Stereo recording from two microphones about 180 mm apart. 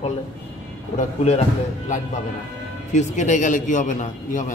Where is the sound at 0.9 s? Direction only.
35° left (ahead or behind).